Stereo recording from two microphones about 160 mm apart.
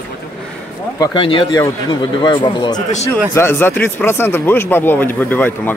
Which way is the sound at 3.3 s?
15° left (ahead or behind).